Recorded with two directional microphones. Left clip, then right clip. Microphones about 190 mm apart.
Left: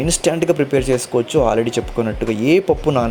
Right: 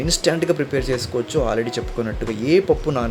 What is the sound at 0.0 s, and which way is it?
Speech, 15° left (ahead or behind).